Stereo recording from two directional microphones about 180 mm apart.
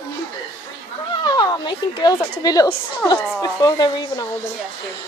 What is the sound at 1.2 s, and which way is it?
A woman's voice, 25° left (ahead or behind).